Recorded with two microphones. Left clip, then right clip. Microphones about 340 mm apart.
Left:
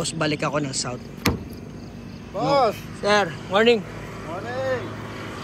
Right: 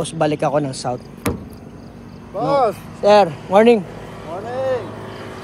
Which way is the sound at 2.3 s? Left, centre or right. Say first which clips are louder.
Right 3 dB; right.